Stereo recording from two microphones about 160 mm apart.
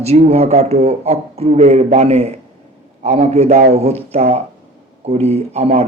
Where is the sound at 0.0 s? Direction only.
40° right (ahead or behind).